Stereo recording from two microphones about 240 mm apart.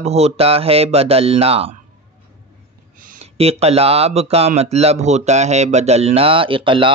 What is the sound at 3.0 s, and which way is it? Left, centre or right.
Speech, right.